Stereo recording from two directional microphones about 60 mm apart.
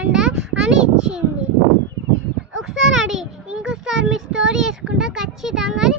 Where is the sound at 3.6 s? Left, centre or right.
Centre.